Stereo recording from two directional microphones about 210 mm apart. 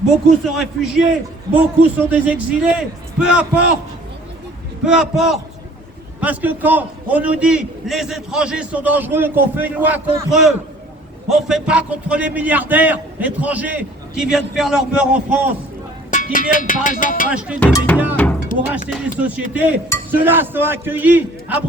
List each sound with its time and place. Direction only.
0.4 s a man's voice: centre (ahead or behind)
4.9 s a man's voice: 5° right (ahead or behind)
16.1 s speech: 40° left (ahead or behind)
17.6 s speech: 10° left (ahead or behind)
17.9 s cowbell: 10° right (ahead or behind)
18.9 s a man's voice: 5° right (ahead or behind)